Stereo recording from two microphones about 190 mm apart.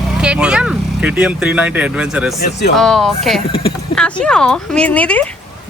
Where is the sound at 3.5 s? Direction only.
30° left (ahead or behind).